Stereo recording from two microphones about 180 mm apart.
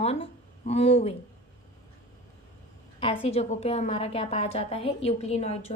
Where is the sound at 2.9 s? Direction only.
30° left (ahead or behind).